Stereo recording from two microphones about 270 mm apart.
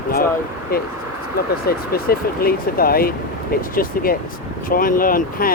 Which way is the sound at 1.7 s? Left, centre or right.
Left.